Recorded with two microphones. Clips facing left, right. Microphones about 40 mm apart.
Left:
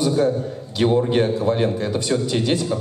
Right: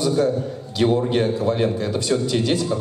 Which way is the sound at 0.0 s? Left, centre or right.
Left.